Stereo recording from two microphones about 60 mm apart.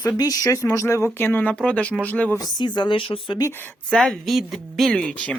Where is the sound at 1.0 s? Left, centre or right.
Left.